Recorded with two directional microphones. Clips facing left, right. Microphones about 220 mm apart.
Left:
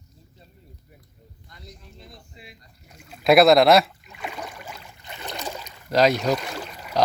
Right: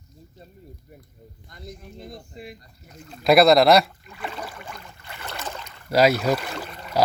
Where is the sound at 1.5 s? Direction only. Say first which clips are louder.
Right 7 dB; 50° right (ahead or behind).